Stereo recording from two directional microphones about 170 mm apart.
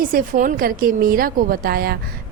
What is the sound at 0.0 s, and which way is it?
A woman's voice, 55° right (ahead or behind).